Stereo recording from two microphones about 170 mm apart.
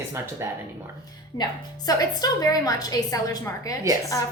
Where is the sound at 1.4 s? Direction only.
25° left (ahead or behind).